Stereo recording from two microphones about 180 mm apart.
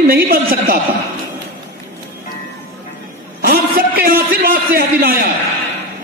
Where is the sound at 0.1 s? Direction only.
55° right (ahead or behind).